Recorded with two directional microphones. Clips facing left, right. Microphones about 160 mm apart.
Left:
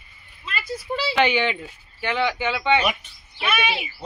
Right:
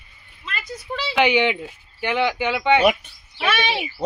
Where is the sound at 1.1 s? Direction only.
15° right (ahead or behind).